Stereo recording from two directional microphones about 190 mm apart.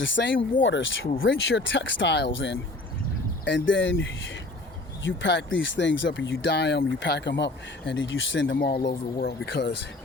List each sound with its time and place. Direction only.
0.0 s speech: 75° left (ahead or behind)
5.0 s speech: 70° left (ahead or behind)
8.9 s speech: 50° left (ahead or behind)